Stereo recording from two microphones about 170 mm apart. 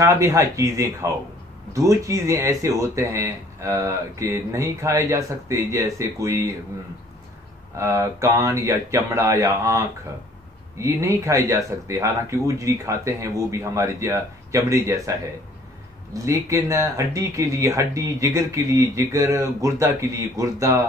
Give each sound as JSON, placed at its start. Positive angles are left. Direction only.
{"t": 0.0, "sound": "speech", "side_deg": -20}
{"t": 7.7, "sound": "speech", "side_deg": -20}